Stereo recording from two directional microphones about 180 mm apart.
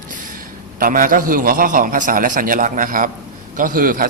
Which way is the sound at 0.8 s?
50° right (ahead or behind).